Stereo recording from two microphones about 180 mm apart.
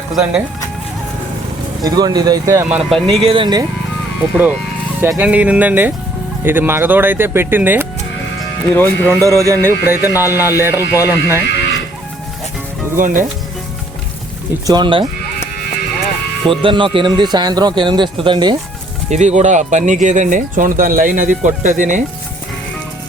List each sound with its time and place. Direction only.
1.8 s speech: 20° right (ahead or behind); by 3.2 s centre (ahead or behind)
3.2 s speech: 25° right (ahead or behind)
4.2 s speech: 10° right (ahead or behind)
8.7 s speech: 10° left (ahead or behind)
9.2 s speech: 15° right (ahead or behind)
13.0 s speech: 45° right (ahead or behind)
14.7 s speech: 25° right (ahead or behind)
16.5 s speech: 30° right (ahead or behind)
19.1 s speech: 40° right (ahead or behind)